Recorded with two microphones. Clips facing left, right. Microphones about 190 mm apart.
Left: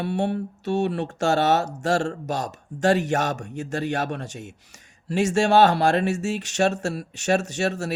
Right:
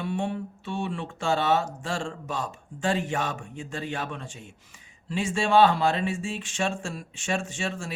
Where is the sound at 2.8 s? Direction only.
75° left (ahead or behind).